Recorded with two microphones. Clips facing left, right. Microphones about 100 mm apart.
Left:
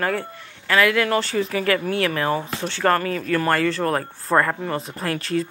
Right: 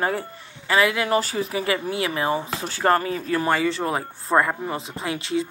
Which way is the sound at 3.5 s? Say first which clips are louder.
Left 2 dB; 10° right (ahead or behind).